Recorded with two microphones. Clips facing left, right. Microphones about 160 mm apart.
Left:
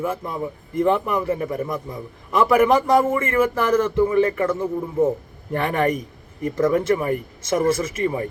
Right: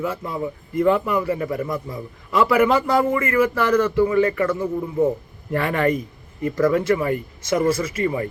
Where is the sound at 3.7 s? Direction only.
25° left (ahead or behind).